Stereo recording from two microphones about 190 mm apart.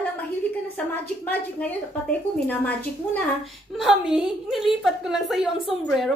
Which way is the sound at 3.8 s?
Centre (ahead or behind).